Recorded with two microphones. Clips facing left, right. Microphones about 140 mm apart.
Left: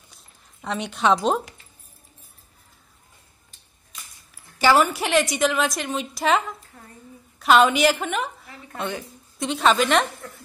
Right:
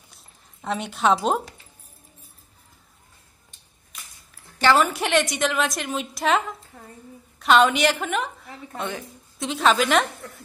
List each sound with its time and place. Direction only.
0.1 s zipper: centre (ahead or behind)
4.6 s a woman's voice: 5° left (ahead or behind)